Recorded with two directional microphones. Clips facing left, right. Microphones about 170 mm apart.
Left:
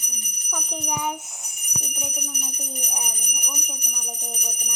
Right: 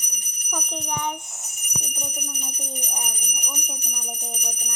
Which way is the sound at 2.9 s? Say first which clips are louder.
Even; centre (ahead or behind).